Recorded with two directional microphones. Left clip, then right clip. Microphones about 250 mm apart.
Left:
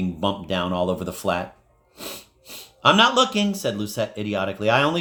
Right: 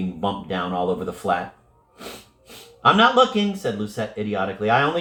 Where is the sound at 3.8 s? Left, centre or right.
Left.